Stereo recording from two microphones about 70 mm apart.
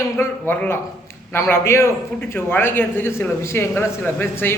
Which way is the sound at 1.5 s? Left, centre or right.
Left.